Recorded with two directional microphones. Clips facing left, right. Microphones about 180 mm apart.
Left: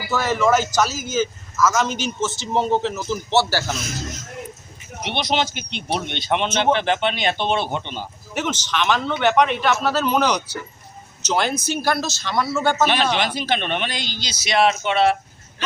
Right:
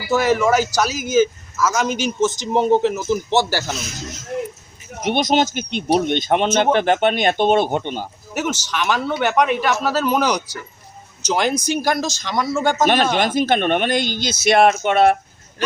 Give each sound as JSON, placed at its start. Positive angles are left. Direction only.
{"t": 0.1, "sound": "a man's voice", "side_deg": -10}
{"t": 5.0, "sound": "speech", "side_deg": -45}
{"t": 8.4, "sound": "a man's voice", "side_deg": -10}
{"t": 12.8, "sound": "speech", "side_deg": -45}